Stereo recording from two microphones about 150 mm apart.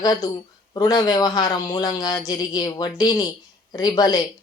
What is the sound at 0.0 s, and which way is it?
A woman's voice, 25° left (ahead or behind).